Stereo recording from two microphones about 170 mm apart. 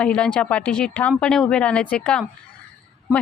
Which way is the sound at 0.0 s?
5° left (ahead or behind).